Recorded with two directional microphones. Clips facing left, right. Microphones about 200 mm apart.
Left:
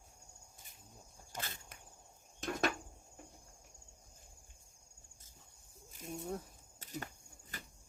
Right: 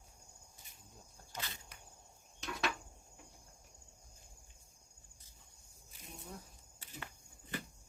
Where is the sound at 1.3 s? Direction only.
50° left (ahead or behind).